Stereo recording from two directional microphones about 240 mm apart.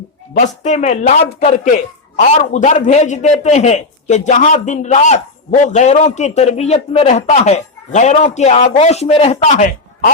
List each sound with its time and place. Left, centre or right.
0.3 s a man's voice: left